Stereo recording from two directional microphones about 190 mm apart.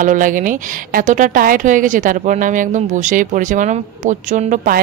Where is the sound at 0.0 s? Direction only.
45° right (ahead or behind).